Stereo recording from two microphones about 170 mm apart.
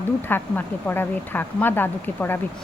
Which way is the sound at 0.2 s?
10° left (ahead or behind).